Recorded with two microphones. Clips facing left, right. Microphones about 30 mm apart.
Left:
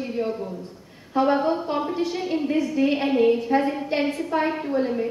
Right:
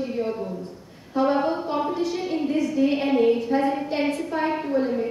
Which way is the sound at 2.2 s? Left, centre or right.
Centre.